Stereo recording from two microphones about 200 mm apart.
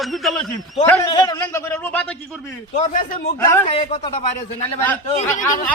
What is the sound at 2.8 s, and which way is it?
Speech, 35° left (ahead or behind).